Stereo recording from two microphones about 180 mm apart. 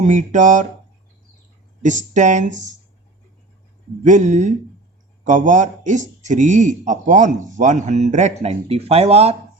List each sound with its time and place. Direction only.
0.0 s a man's voice: 40° right (ahead or behind)
1.8 s a man's voice: 45° right (ahead or behind)
4.0 s a man's voice: 40° right (ahead or behind)